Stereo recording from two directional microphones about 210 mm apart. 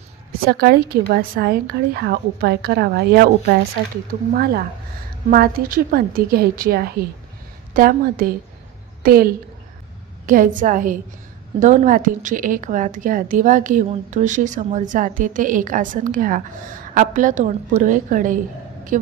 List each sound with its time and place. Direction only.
0.5 s a woman's voice: 50° right (ahead or behind)